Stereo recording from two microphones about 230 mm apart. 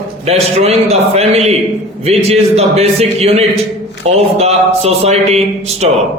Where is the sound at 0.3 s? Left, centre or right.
Right.